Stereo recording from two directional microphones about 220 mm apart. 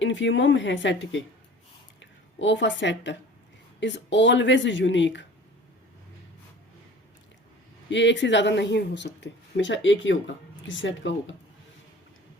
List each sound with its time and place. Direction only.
0.0 s speech: 55° left (ahead or behind)
7.9 s speech: 55° left (ahead or behind)